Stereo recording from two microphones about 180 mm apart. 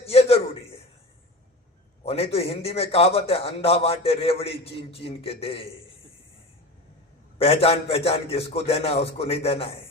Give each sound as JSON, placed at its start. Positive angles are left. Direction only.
{"t": 0.0, "sound": "a sound", "side_deg": 35}
{"t": 2.0, "sound": "a man's voice", "side_deg": 35}
{"t": 7.3, "sound": "a man's voice", "side_deg": 35}